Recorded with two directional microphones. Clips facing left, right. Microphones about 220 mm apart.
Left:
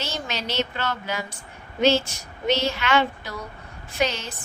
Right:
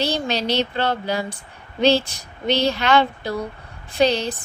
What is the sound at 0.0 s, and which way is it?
A woman's voice, 35° right (ahead or behind).